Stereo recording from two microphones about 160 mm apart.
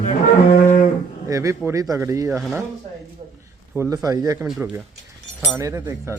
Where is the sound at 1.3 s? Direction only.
20° right (ahead or behind).